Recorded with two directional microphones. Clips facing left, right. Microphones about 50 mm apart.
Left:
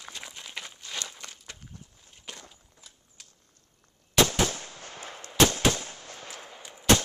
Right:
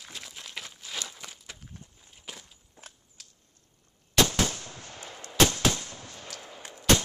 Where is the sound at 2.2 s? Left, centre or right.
Centre.